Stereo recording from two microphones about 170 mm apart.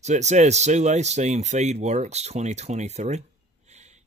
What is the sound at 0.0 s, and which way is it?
Speech, 40° right (ahead or behind).